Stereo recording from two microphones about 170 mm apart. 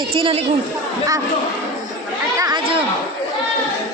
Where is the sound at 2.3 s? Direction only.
25° right (ahead or behind).